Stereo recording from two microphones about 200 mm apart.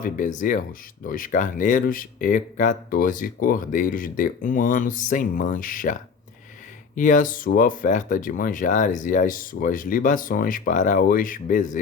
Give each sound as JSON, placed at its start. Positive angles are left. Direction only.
{"t": 0.0, "sound": "speech", "side_deg": 40}